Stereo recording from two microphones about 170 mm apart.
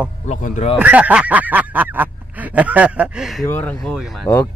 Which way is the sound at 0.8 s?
10° right (ahead or behind).